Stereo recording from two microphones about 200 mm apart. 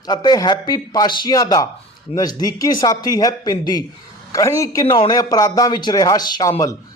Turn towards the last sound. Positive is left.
turn(degrees=15)  # may be behind; listen again after turning